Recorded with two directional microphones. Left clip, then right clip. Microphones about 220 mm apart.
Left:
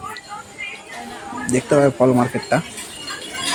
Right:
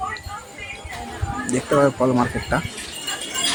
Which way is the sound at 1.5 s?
10° left (ahead or behind).